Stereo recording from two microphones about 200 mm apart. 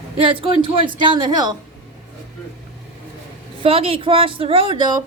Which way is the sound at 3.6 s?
30° right (ahead or behind).